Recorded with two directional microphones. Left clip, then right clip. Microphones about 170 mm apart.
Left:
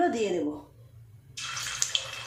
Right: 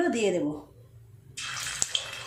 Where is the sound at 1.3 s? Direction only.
Centre (ahead or behind).